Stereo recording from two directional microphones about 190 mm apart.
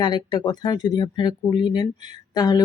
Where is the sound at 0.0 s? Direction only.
25° left (ahead or behind).